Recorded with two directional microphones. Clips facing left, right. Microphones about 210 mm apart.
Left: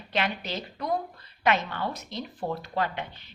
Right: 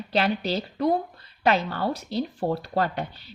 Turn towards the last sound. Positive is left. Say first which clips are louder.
# right 4 dB
turn(degrees=-35)  # may be behind; listen again after turning